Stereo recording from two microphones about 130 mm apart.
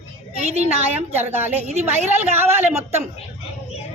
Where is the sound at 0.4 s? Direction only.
60° right (ahead or behind).